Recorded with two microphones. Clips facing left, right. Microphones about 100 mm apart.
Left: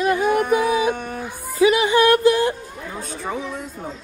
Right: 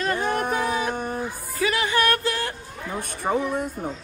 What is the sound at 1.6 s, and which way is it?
Speech, 15° left (ahead or behind).